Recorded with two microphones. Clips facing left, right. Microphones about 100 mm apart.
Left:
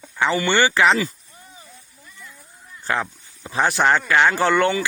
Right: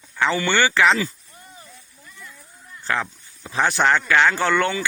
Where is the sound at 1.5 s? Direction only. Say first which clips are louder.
Even; 15° left (ahead or behind).